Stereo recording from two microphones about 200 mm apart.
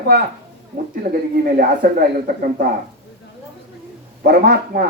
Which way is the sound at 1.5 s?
45° right (ahead or behind).